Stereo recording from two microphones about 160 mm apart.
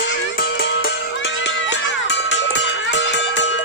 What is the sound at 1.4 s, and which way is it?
Music, 90° left.